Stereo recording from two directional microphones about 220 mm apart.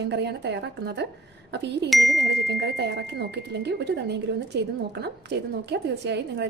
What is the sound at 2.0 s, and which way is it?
A woman's voice, 50° right (ahead or behind).